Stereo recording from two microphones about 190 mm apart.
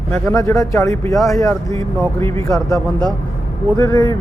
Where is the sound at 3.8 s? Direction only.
20° left (ahead or behind).